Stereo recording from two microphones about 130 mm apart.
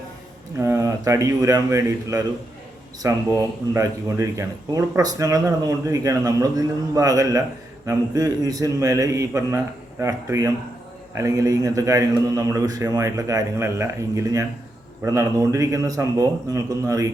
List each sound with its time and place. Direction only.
0.6 s speech: 25° right (ahead or behind)